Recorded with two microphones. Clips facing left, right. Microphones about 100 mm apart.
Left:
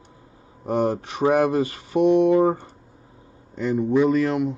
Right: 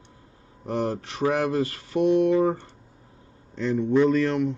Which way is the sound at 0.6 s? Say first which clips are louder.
Left 5 dB; 15° left (ahead or behind).